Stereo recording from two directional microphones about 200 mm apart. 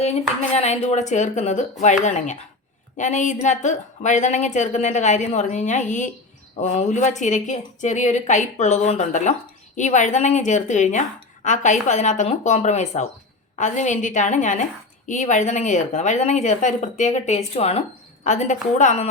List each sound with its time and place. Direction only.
0.0 s a woman's voice: 35° left (ahead or behind)